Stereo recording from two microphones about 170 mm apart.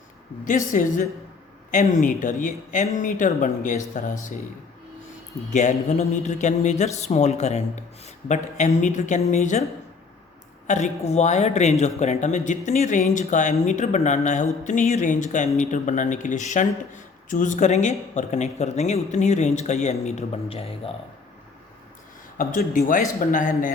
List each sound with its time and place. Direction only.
0.7 s speech: 50° left (ahead or behind)
5.5 s a man's voice: 45° left (ahead or behind)
10.7 s speech: 40° left (ahead or behind)
22.4 s speech: 50° left (ahead or behind)